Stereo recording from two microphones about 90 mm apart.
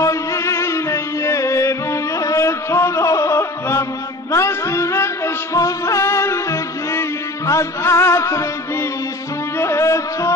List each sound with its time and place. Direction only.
0.0 s music: 35° left (ahead or behind)
9.6 s music: 30° left (ahead or behind)